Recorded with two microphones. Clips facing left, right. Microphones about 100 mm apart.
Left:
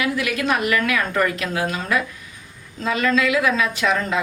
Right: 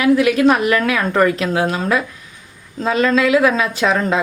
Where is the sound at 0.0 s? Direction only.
35° right (ahead or behind).